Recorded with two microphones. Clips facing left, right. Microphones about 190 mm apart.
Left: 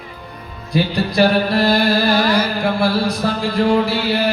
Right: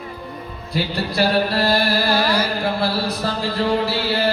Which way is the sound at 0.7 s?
15° left (ahead or behind).